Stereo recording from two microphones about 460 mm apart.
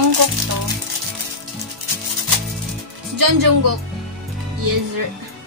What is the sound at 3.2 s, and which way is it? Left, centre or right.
Speech, right.